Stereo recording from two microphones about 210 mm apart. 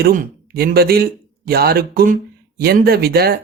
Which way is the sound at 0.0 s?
45° right (ahead or behind).